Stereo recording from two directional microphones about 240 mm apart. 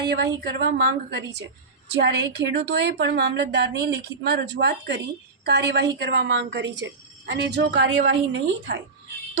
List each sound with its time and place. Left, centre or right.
0.1 s a woman's voice: right